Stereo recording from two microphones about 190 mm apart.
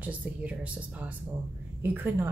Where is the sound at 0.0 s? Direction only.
10° right (ahead or behind).